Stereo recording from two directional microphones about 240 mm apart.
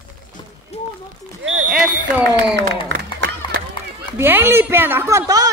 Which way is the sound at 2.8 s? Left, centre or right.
Right.